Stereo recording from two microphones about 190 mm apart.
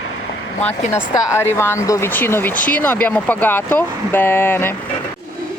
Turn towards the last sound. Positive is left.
turn(degrees=10)  # may be behind; listen again after turning